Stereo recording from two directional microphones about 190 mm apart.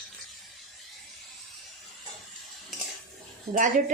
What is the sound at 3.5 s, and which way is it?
Speech, 45° right (ahead or behind).